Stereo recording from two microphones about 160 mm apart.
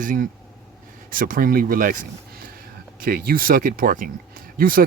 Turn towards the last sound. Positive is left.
turn(degrees=-60)  # may be behind; listen again after turning